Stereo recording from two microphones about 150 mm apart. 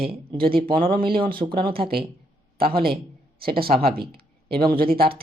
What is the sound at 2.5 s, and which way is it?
Speech, 90° right.